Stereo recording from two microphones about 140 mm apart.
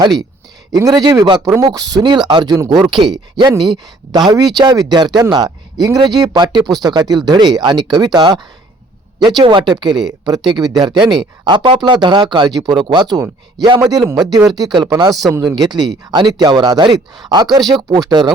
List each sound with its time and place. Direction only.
0.8 s speech: 25° right (ahead or behind)